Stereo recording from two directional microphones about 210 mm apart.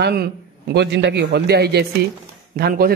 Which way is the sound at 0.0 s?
50° right (ahead or behind).